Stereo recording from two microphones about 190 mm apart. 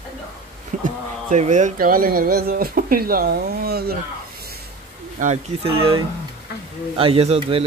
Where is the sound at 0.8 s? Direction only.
40° right (ahead or behind).